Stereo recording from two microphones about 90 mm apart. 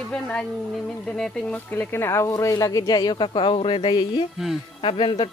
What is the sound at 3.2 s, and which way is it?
Speech, 70° left (ahead or behind).